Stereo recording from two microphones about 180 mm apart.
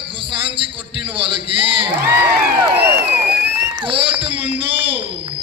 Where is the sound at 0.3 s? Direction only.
30° right (ahead or behind).